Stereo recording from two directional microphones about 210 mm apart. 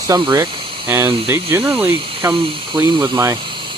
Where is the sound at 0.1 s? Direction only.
15° right (ahead or behind).